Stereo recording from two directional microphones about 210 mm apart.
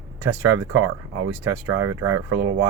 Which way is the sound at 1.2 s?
90° right.